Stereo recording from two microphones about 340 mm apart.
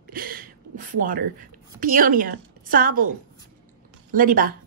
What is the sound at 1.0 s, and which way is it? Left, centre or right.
A woman's voice, right.